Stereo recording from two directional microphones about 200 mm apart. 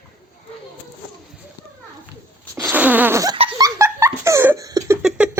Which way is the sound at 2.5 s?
10° right (ahead or behind).